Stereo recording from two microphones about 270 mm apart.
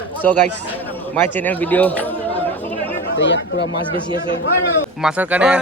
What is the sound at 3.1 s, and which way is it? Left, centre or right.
Speech, left.